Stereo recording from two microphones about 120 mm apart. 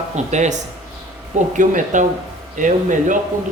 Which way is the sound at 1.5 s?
90° right.